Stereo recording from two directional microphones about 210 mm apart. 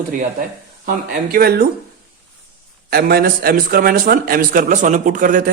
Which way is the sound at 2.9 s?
45° right (ahead or behind).